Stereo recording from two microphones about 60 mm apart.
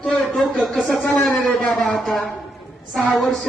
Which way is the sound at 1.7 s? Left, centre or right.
Centre.